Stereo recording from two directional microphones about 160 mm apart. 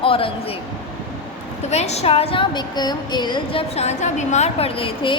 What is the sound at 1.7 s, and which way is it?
A woman's voice, 45° left (ahead or behind).